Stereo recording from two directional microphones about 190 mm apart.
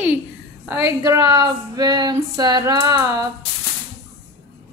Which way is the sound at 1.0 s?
15° right (ahead or behind).